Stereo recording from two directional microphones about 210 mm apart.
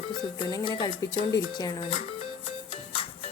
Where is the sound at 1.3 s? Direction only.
15° left (ahead or behind).